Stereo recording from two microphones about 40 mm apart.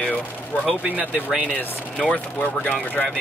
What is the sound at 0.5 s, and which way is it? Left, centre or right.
Speech, left.